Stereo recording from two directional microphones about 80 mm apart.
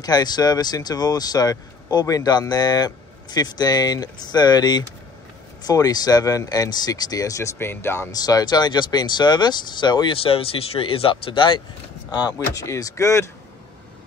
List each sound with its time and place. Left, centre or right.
0.0 s speech: left
7.5 s speech: left
8.1 s speech: left
10.9 s speech: left
12.1 s speech: left
12.6 s speech: left